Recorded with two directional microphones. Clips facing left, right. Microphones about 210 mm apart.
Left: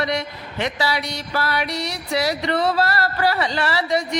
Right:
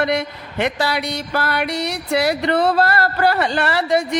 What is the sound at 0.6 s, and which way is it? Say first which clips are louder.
Speech: right 3 dB; 55° right (ahead or behind).